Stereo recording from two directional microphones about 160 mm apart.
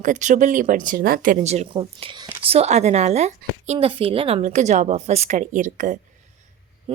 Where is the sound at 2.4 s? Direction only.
40° right (ahead or behind).